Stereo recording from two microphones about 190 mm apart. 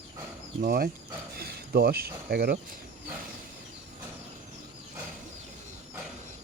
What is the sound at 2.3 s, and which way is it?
Speech, 55° right (ahead or behind).